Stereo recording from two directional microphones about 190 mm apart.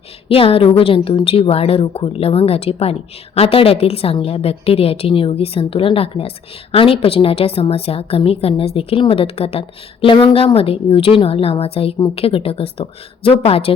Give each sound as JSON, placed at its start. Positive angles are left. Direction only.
{"t": 0.3, "sound": "a woman's voice", "side_deg": 30}